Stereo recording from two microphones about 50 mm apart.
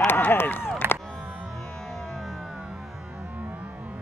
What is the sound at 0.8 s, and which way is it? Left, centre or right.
Music, right.